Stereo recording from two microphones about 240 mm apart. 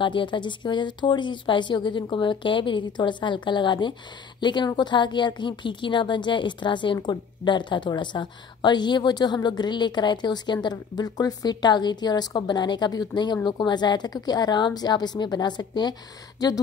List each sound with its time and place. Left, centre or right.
0.0 s a woman's voice: centre